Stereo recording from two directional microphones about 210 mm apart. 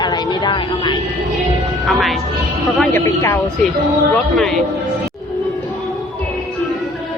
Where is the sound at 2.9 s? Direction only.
10° left (ahead or behind).